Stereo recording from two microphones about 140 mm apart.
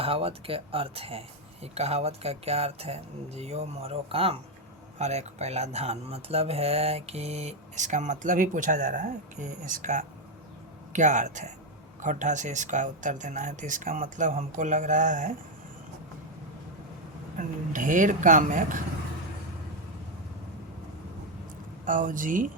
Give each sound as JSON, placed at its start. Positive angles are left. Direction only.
{"t": 0.0, "sound": "speech", "side_deg": -40}
{"t": 17.3, "sound": "speech", "side_deg": -70}
{"t": 21.8, "sound": "speech", "side_deg": -70}